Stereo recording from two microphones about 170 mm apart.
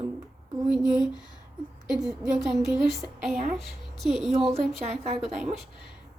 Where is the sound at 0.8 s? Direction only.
25° left (ahead or behind).